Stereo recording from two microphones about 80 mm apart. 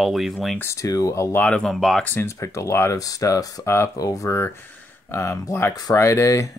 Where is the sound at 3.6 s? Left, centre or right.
Left.